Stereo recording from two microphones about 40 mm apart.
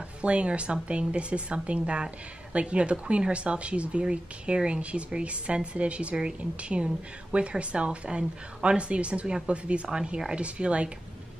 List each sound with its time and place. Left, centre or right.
0.2 s a woman's voice: right